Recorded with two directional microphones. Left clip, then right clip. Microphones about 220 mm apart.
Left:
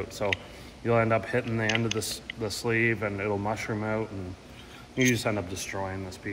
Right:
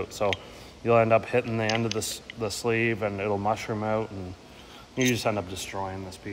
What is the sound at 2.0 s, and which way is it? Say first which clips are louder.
Speech: right 1 dB; 30° right (ahead or behind).